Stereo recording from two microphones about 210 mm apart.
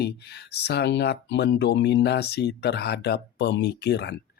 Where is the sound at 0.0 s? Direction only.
50° left (ahead or behind).